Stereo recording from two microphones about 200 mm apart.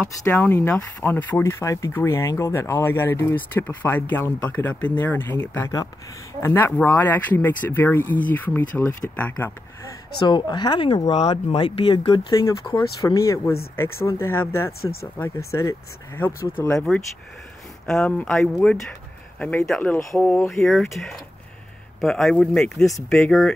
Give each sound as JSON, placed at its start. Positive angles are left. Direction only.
{"t": 0.2, "sound": "speech", "side_deg": 10}
{"t": 10.2, "sound": "speech", "side_deg": 20}
{"t": 17.8, "sound": "speech", "side_deg": 5}